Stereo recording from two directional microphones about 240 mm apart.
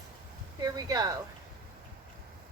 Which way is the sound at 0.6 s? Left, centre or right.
Centre.